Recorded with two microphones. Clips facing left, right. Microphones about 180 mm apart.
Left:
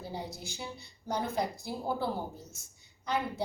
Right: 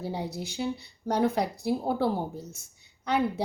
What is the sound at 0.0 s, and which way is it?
A woman's voice, 65° right (ahead or behind).